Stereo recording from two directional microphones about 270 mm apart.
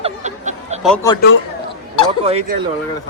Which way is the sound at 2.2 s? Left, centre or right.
Right.